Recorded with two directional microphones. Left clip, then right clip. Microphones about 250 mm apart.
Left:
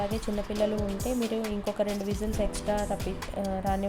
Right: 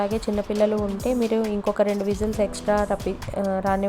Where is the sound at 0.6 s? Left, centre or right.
Centre.